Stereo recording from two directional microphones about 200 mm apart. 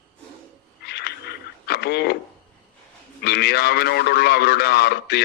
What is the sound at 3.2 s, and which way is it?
A man's voice, 55° left (ahead or behind).